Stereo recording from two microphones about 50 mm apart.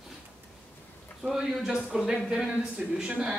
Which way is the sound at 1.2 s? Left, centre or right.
Centre.